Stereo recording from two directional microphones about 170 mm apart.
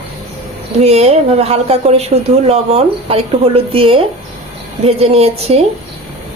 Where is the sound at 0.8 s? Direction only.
40° right (ahead or behind).